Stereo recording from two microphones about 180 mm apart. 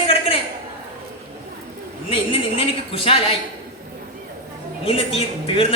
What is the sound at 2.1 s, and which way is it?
A woman's voice, 30° left (ahead or behind).